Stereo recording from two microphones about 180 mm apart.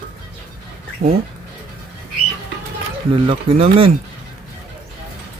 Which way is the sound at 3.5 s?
30° right (ahead or behind).